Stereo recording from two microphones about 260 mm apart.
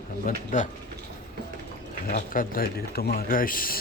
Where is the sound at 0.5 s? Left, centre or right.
Left.